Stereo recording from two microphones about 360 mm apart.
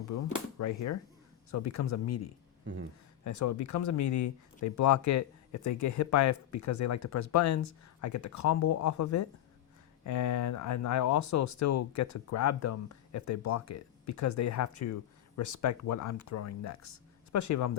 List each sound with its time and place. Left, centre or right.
0.1 s speech: left